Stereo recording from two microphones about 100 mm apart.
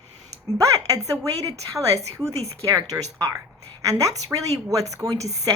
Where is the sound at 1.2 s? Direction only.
35° right (ahead or behind).